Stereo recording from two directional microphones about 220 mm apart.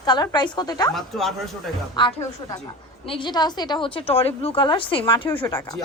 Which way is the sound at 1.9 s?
20° left (ahead or behind).